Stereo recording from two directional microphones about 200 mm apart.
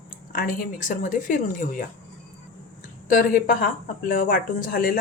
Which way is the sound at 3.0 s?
45° left (ahead or behind).